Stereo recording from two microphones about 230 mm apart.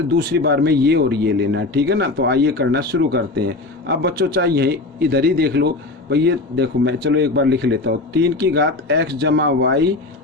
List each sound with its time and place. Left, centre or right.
0.2 s speech: right